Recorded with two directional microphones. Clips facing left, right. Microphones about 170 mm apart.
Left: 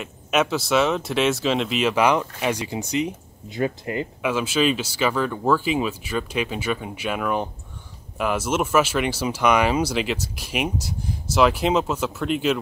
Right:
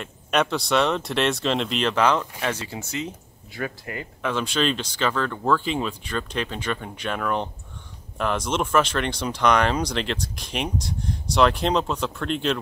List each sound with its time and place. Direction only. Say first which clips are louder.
0.0 s speech: left 1 dB; 5° left (ahead or behind); by 4.1 s 25° left (ahead or behind)
4.2 s speech: left 2 dB; 5° left (ahead or behind)